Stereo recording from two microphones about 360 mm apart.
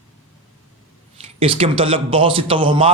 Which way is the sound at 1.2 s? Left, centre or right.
Centre.